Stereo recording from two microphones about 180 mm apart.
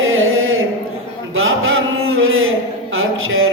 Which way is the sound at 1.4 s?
90° right.